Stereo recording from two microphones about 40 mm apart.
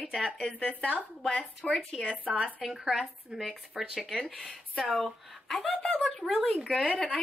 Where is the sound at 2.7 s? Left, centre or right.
Centre.